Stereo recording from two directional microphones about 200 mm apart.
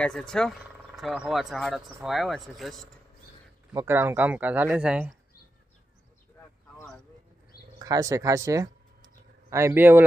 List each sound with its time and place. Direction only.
0.0 s speech: 5° left (ahead or behind)
3.7 s speech: 10° right (ahead or behind)
7.8 s a sound: 15° right (ahead or behind)